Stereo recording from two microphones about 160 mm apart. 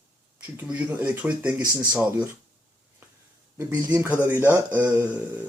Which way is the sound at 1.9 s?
10° right (ahead or behind).